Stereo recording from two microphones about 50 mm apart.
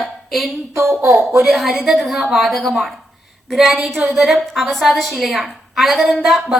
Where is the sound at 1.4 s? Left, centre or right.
Centre.